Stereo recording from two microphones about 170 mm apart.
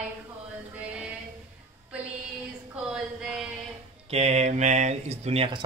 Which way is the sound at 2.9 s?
5° right (ahead or behind).